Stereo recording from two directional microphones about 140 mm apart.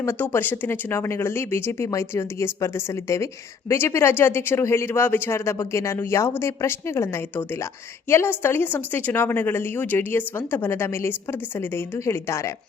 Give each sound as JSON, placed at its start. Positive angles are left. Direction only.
{"t": 0.0, "sound": "speech", "side_deg": 15}